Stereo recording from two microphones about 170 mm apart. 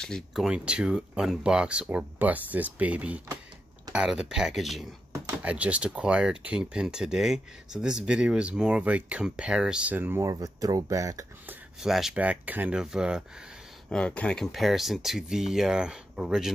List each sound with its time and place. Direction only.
0.0 s speech: centre (ahead or behind); by 11.5 s 20° right (ahead or behind)
11.8 s speech: 5° right (ahead or behind)
13.8 s speech: 5° left (ahead or behind)